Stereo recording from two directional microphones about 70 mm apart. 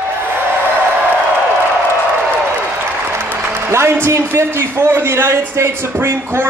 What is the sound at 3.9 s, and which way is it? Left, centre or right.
A man's voice, right.